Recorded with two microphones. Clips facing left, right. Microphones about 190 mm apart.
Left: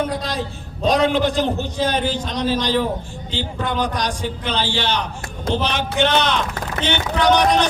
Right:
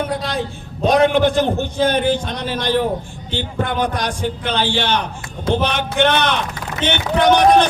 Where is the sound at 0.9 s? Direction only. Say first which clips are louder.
Right 3 dB; 55° right (ahead or behind).